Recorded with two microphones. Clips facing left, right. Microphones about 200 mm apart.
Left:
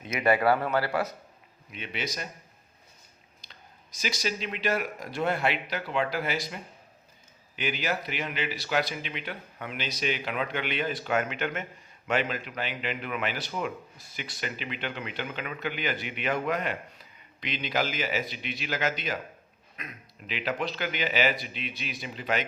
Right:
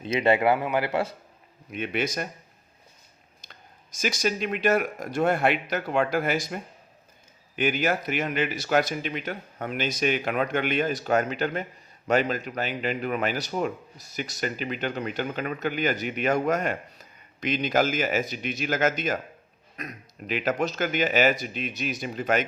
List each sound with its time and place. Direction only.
0.0 s speech: 30° right (ahead or behind)
1.7 s a man's voice: 50° right (ahead or behind)
3.4 s a man's voice: 50° right (ahead or behind)